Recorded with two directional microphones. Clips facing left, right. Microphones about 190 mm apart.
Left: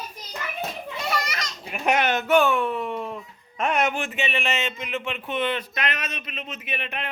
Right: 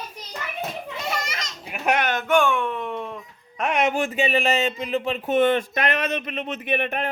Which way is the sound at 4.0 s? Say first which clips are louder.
Right 6 dB; 35° right (ahead or behind).